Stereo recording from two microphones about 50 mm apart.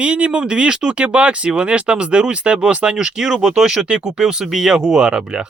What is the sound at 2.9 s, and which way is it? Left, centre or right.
Speech, centre.